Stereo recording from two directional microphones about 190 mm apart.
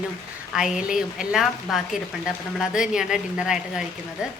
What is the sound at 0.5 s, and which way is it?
A woman's voice, 5° right (ahead or behind).